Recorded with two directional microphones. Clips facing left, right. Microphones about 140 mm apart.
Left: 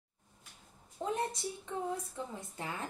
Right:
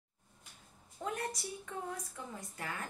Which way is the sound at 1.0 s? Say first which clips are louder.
Left 4 dB; 25° left (ahead or behind).